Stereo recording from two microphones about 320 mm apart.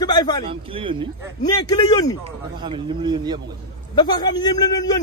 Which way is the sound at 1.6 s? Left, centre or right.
Centre.